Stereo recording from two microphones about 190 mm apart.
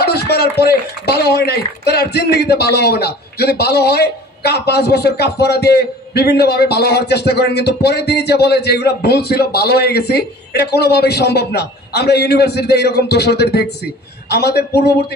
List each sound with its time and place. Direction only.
0.0 s speech: 55° left (ahead or behind)